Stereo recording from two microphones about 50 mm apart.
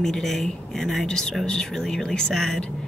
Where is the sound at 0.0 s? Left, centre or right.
Centre.